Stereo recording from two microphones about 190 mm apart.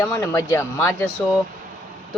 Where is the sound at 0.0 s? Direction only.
15° left (ahead or behind).